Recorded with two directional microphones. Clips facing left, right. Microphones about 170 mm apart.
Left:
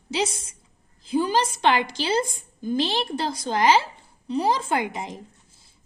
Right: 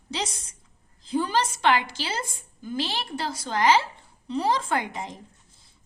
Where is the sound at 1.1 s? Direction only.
10° left (ahead or behind).